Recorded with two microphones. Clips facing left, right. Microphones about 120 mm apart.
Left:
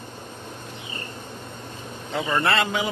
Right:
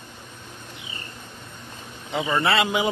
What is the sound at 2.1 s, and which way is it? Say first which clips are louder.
Speech: right 1 dB; 5° right (ahead or behind).